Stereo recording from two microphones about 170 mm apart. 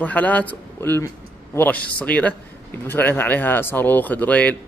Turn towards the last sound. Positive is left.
turn(degrees=10)  # may be behind; listen again after turning